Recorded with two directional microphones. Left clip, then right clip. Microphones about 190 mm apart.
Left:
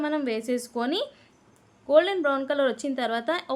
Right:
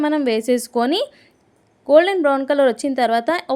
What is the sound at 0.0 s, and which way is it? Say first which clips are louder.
A woman's voice: right 9 dB; 35° right (ahead or behind).